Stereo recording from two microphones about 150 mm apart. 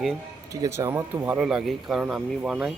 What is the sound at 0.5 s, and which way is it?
Speech, 20° right (ahead or behind).